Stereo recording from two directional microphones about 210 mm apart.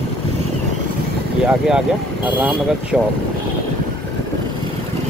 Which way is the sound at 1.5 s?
5° right (ahead or behind).